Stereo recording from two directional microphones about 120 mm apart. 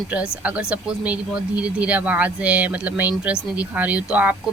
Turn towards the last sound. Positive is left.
turn(degrees=-10)  # may be behind; listen again after turning